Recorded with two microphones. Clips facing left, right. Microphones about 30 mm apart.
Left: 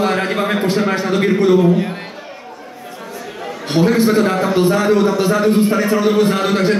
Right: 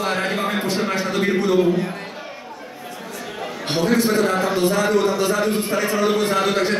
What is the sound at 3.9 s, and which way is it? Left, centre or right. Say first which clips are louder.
A man's voice: left 4 dB; centre.